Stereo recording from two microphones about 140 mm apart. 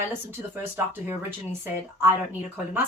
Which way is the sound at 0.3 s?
15° right (ahead or behind).